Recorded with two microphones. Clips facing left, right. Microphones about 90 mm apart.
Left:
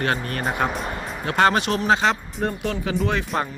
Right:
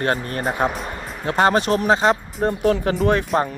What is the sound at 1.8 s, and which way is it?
Speech, 40° right (ahead or behind).